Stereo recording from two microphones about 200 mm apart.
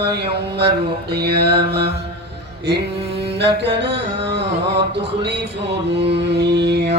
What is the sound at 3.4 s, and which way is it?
Music, 60° right (ahead or behind).